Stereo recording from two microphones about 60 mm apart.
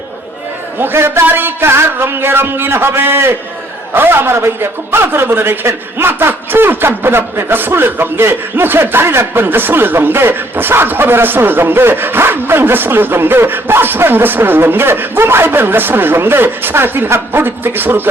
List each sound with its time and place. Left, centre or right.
0.8 s a man's voice: right